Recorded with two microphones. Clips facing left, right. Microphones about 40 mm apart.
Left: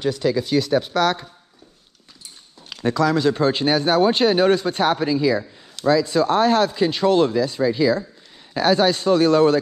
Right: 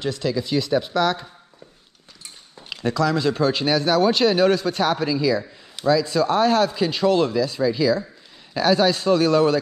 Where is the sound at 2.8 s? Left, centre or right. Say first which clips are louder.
Left 2 dB; left.